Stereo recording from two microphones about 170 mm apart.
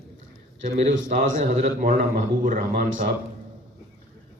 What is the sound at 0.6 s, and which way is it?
A man's voice, 45° right (ahead or behind).